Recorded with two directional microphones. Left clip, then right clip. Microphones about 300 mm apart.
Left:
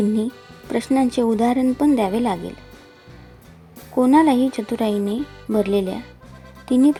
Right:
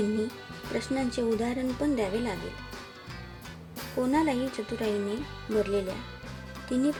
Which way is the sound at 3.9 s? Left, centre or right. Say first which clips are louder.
Left 12 dB; centre.